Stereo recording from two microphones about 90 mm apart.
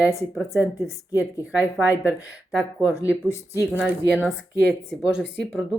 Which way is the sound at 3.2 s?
35° left (ahead or behind).